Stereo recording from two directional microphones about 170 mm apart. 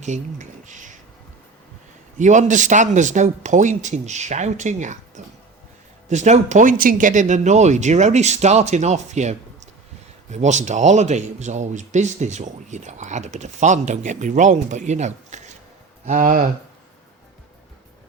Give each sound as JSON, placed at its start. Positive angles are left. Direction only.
{"t": 0.0, "sound": "a sound", "side_deg": -45}
{"t": 2.1, "sound": "speech", "side_deg": -45}
{"t": 10.3, "sound": "speech", "side_deg": -45}